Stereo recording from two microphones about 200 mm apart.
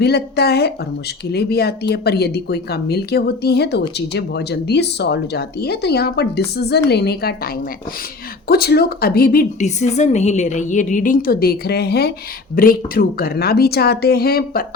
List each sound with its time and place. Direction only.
0.0 s speech: 55° left (ahead or behind)